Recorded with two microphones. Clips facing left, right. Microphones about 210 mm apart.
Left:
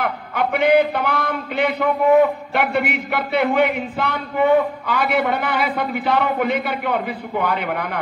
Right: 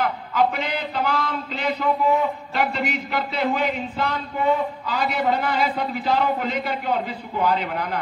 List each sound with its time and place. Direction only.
0.0 s a man's voice: 60° left (ahead or behind)